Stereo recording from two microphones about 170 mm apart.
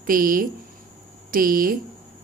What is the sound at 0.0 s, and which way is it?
Speech, 55° right (ahead or behind).